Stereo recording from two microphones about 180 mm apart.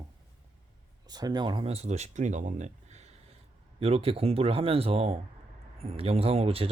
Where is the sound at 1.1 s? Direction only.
20° right (ahead or behind).